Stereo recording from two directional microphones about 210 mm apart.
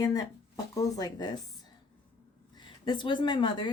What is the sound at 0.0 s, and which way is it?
Speech, 15° left (ahead or behind).